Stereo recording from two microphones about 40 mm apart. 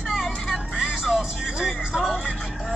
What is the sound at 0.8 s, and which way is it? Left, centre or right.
Music, centre.